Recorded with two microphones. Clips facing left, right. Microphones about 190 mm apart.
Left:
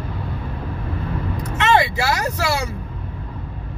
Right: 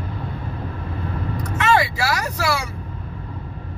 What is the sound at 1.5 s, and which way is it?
Vehicle, 20° left (ahead or behind).